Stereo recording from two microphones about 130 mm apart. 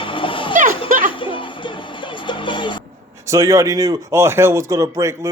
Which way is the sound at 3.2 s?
25° right (ahead or behind).